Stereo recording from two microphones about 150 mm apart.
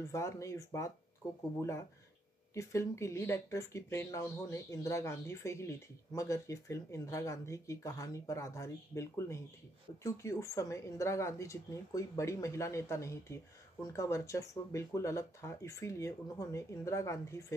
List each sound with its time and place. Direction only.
0.1 s speech: 20° left (ahead or behind)